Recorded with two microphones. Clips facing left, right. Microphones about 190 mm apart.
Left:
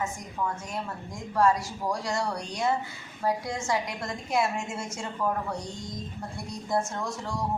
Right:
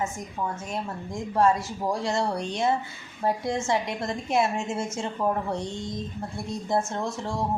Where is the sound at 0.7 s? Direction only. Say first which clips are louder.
Right 3 dB; 25° right (ahead or behind).